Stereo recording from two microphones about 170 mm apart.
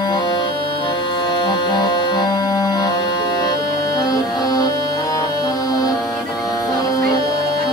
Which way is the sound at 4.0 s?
25° left (ahead or behind).